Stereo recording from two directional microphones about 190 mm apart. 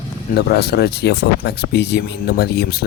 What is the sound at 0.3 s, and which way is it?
Speech, 55° left (ahead or behind).